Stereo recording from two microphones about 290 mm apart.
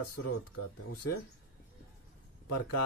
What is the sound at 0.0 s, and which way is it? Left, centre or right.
Speech, left.